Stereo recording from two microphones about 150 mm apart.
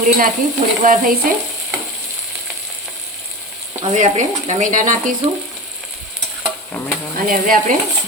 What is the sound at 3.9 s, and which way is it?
Speech, 55° right (ahead or behind).